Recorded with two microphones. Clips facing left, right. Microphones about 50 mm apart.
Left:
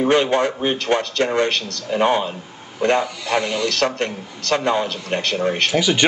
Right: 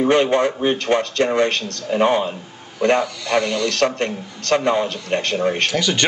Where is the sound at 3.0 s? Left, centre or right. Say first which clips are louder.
Right 1 dB; centre.